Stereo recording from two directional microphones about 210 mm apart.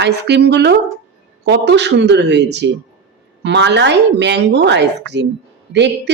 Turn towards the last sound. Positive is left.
turn(degrees=-55)  # may be behind; listen again after turning